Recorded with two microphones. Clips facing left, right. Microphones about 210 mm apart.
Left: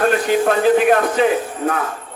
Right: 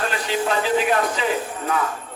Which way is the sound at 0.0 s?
50° left (ahead or behind).